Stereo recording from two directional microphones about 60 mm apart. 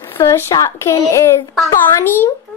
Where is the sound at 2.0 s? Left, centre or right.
Left.